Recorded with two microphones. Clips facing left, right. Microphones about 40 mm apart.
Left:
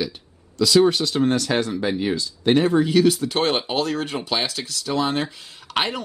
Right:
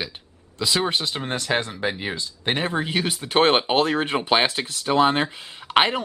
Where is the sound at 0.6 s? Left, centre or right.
Right.